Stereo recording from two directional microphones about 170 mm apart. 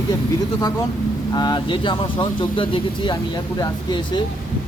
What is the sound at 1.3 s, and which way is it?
Speech, 25° left (ahead or behind).